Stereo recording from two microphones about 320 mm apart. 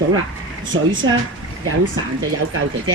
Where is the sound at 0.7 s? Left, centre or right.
Right.